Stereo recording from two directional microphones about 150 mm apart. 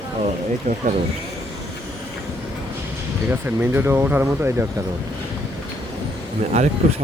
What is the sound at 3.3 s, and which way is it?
Speech, 15° right (ahead or behind).